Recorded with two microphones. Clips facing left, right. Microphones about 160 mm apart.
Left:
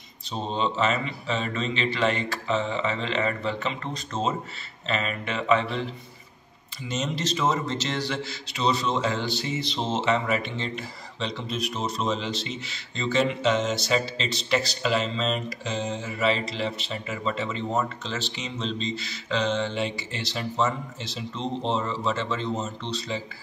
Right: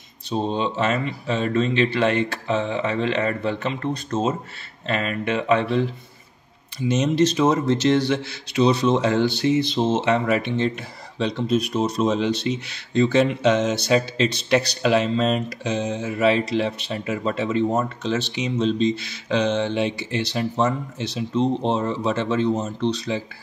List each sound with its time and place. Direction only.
0.3 s a man's voice: 55° right (ahead or behind)
7.0 s a man's voice: 55° right (ahead or behind)